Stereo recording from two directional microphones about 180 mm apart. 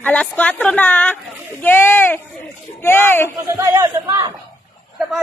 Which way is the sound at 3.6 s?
20° right (ahead or behind).